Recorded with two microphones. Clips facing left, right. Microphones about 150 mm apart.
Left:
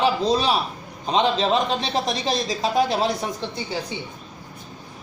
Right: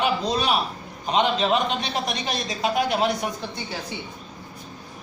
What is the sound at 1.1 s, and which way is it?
A man's voice, 30° left (ahead or behind).